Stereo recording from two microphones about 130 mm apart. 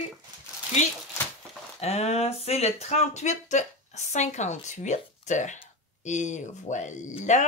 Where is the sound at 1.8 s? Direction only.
55° left (ahead or behind).